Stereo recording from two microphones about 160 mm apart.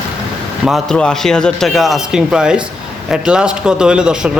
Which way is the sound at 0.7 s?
5° left (ahead or behind).